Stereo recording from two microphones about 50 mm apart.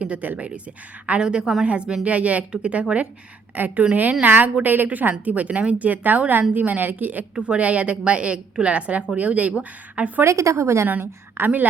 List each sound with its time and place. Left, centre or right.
0.0 s a woman's voice: right
3.5 s speech: right
7.3 s a woman's voice: right
10.2 s speech: right
11.4 s speech: right